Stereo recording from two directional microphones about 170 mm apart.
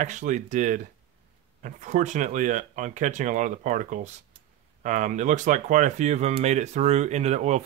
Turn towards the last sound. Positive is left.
turn(degrees=-40)  # may be behind; listen again after turning